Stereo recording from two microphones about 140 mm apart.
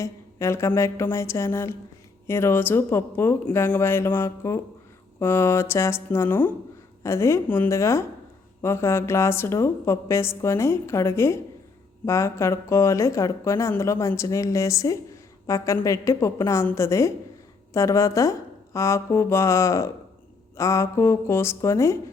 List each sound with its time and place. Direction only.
0.0 s speech: 20° left (ahead or behind)